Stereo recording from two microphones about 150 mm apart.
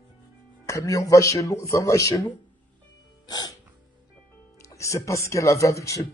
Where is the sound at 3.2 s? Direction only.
25° left (ahead or behind).